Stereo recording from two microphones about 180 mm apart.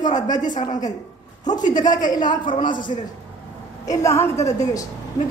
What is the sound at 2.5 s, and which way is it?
A woman's voice, 25° left (ahead or behind).